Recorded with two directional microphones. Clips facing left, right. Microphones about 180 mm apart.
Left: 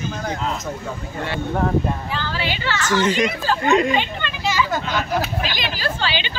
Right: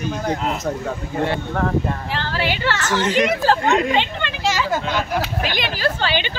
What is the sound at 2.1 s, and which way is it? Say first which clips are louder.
Speech: right 2 dB; 70° right (ahead or behind).